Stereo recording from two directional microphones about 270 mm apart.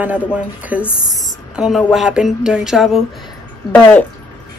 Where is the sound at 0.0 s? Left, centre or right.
Centre.